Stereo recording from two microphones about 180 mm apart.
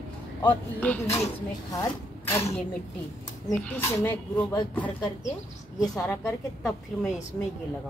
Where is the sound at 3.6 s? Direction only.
5° left (ahead or behind).